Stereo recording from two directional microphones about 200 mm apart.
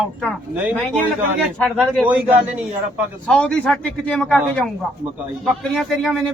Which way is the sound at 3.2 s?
5° left (ahead or behind).